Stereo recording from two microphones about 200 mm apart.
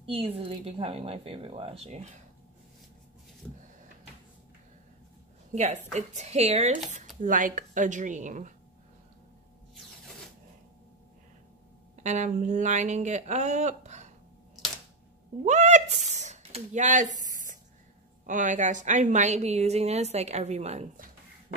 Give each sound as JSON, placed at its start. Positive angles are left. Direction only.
{"t": 0.0, "sound": "speech", "side_deg": -30}
{"t": 3.4, "sound": "power windows", "side_deg": 5}
{"t": 5.5, "sound": "a woman's voice", "side_deg": -35}
{"t": 12.0, "sound": "a woman's voice", "side_deg": -35}
{"t": 15.4, "sound": "a woman's voice", "side_deg": -35}